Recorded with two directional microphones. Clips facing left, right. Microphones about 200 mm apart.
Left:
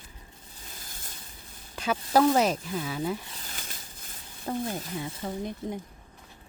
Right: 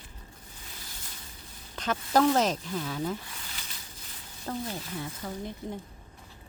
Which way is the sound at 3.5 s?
50° left (ahead or behind).